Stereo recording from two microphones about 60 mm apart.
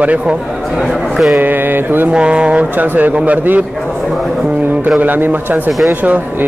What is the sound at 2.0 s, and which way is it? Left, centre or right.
Speech, centre.